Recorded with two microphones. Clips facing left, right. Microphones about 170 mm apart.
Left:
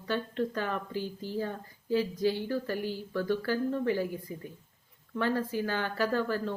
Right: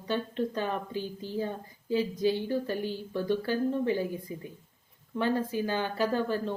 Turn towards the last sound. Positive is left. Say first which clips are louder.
# right 1 dB
turn(degrees=-20)  # may be behind; listen again after turning